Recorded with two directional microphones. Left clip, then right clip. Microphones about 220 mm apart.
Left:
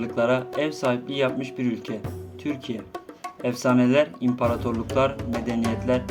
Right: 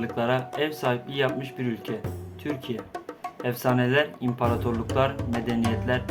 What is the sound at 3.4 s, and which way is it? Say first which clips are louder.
Speech: left 3 dB; 30° left (ahead or behind).